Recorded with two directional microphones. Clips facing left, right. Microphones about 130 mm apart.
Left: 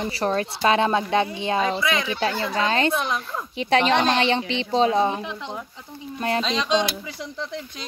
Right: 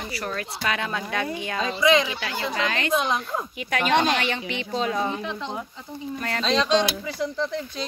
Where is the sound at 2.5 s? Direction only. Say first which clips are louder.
Left 5 dB; 30° left (ahead or behind).